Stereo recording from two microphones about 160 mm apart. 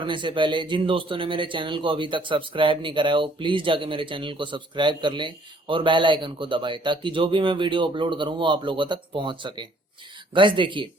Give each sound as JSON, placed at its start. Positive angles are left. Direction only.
{"t": 0.0, "sound": "speech", "side_deg": -30}